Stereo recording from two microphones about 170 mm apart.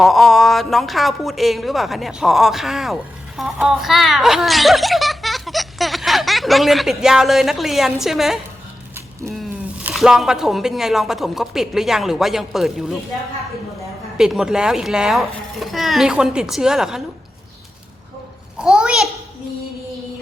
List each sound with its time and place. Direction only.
0.0 s a woman's voice: centre (ahead or behind)
14.2 s speech: 5° right (ahead or behind)
18.6 s a sound: 5° right (ahead or behind)